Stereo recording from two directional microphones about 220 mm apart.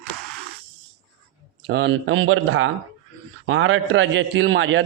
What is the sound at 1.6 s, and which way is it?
A man's voice, 50° right (ahead or behind).